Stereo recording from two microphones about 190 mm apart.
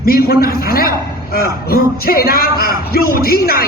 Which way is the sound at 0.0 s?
50° left (ahead or behind).